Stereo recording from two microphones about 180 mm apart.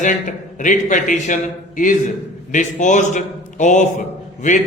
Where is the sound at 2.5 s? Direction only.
40° left (ahead or behind).